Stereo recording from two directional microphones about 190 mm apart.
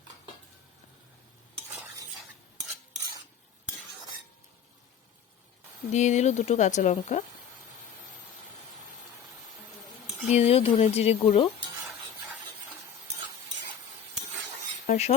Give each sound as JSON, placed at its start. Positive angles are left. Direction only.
{"t": 5.9, "sound": "speech", "side_deg": 40}
{"t": 10.3, "sound": "speech", "side_deg": 30}
{"t": 14.8, "sound": "a sound", "side_deg": 35}